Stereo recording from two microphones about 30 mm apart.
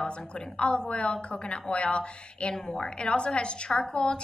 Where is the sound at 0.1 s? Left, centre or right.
Left.